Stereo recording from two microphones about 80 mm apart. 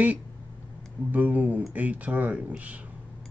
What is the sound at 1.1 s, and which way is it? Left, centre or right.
Speech, centre.